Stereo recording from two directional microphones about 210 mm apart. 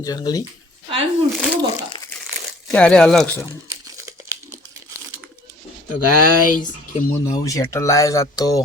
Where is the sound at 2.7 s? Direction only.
5° left (ahead or behind).